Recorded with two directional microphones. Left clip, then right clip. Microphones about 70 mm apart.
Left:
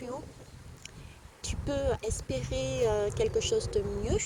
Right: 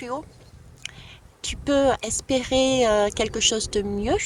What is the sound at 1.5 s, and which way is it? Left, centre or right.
Speech, right.